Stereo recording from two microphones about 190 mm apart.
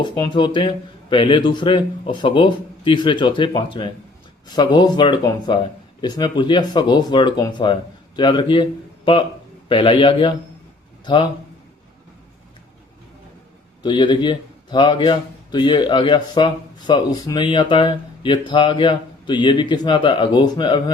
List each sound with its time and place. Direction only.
0.0 s a man's voice: 25° left (ahead or behind)
9.6 s a man's voice: 25° left (ahead or behind)
13.8 s a man's voice: 25° left (ahead or behind)